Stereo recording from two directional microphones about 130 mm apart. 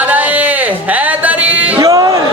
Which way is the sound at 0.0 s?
10° right (ahead or behind).